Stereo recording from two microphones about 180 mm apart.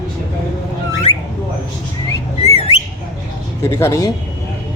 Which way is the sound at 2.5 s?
35° left (ahead or behind).